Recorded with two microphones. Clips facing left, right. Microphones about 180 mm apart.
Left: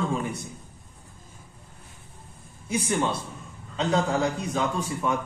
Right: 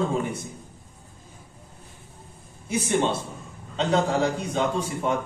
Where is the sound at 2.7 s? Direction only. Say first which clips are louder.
Right 2 dB; 25° right (ahead or behind).